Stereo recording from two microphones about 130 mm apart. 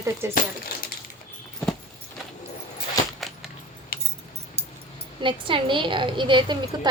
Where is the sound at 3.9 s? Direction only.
90° left.